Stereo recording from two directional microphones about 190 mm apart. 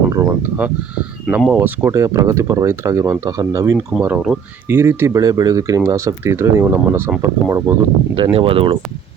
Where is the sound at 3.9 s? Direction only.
5° right (ahead or behind).